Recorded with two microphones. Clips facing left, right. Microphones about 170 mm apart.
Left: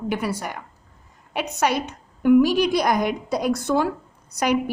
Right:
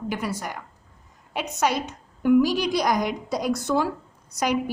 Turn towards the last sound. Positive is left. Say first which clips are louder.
# left 3 dB
turn(degrees=60)  # may be behind; listen again after turning